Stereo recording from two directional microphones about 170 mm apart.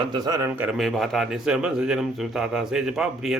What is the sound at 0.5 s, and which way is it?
A man's voice, 5° right (ahead or behind).